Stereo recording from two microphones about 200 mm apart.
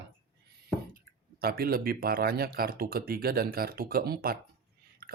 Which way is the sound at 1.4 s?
50° right (ahead or behind).